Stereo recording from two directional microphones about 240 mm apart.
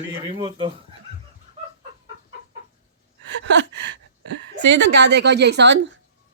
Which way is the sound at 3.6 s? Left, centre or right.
Right.